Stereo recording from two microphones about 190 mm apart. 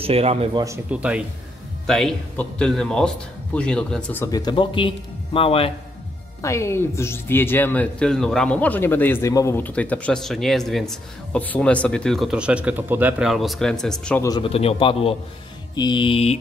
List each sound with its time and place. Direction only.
0.0 s speech: 30° right (ahead or behind)
0.7 s speech: 5° right (ahead or behind); by 5.7 s 30° left (ahead or behind)
6.4 s speech: 15° left (ahead or behind)
14.2 s speech: 25° left (ahead or behind)